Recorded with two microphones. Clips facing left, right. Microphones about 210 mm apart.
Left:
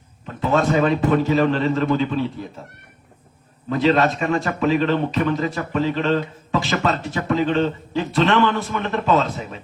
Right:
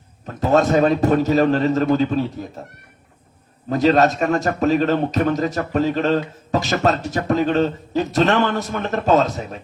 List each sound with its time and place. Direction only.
0.3 s a man's voice: 40° right (ahead or behind)
3.7 s a man's voice: 40° right (ahead or behind)